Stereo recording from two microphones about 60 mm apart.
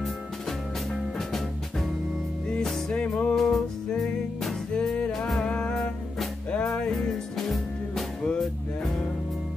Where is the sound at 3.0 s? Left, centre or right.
Centre.